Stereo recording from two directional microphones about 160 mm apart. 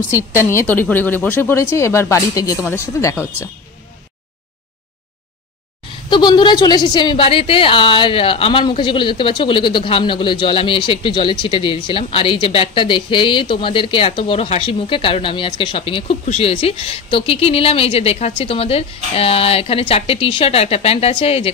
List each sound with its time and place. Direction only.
0.1 s a woman's voice: 20° left (ahead or behind)
6.0 s a woman's voice: 30° left (ahead or behind)